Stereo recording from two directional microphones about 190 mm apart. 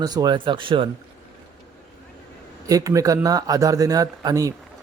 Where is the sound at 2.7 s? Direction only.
15° right (ahead or behind).